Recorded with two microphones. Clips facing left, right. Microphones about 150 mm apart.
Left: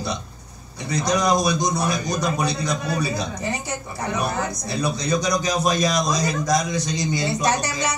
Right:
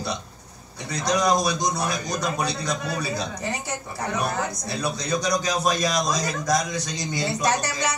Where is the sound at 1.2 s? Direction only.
15° left (ahead or behind).